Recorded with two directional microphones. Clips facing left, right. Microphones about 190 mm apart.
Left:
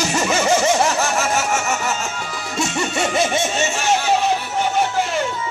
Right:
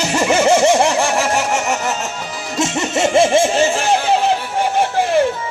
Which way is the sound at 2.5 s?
25° right (ahead or behind).